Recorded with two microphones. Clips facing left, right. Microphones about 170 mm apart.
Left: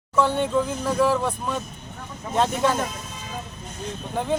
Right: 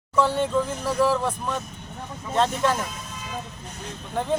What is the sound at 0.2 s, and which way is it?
Speech, centre (ahead or behind).